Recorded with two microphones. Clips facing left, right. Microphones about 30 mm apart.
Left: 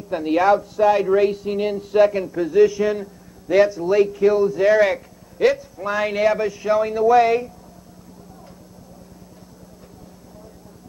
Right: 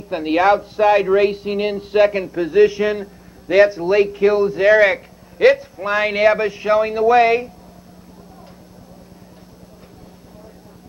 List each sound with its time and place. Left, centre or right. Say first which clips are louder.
0.1 s speech: right 2 dB; right